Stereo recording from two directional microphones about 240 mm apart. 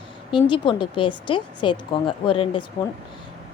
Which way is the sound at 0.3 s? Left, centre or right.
Centre.